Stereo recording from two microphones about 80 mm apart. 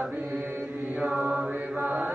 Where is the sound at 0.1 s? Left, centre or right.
Right.